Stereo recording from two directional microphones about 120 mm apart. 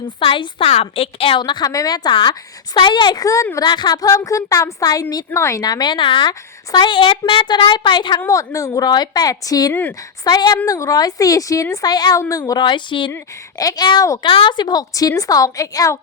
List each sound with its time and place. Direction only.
0.2 s a woman's voice: 45° left (ahead or behind)
3.2 s a woman's voice: 25° left (ahead or behind)
8.3 s a woman's voice: 25° left (ahead or behind); by 13.1 s 40° left (ahead or behind)
13.6 s a woman's voice: 30° left (ahead or behind)
14.3 s a woman's voice: 45° left (ahead or behind)